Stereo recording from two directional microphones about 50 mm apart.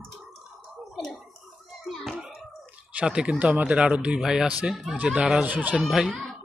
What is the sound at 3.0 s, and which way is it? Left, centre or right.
Speech, centre.